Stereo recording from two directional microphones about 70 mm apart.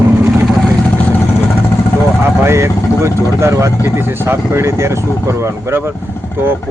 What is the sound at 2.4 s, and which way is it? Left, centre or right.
Speech, right.